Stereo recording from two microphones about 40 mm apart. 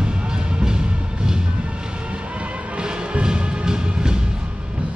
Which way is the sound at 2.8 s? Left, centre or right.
Right.